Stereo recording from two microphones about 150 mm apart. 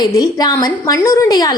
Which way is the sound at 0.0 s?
25° left (ahead or behind).